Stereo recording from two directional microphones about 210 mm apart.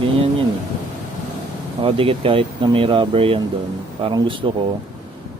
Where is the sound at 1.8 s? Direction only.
25° right (ahead or behind).